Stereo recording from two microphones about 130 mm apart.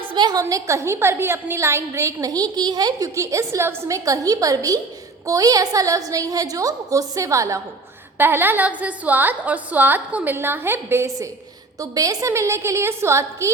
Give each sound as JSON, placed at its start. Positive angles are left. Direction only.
{"t": 0.0, "sound": "a woman's voice", "side_deg": -35}